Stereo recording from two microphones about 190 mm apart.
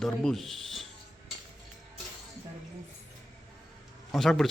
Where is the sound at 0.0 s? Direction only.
Centre (ahead or behind).